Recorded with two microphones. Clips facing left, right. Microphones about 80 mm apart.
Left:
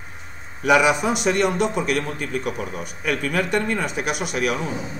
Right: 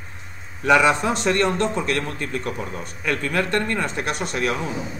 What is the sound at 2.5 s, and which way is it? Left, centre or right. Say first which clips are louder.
Speech: left 1 dB; right.